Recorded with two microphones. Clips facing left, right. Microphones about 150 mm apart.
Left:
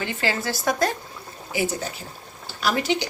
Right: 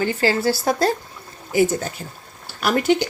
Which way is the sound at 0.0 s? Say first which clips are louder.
Right 7 dB; 40° right (ahead or behind).